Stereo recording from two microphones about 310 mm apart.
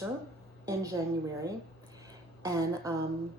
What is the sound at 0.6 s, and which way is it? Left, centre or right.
A woman's voice, centre.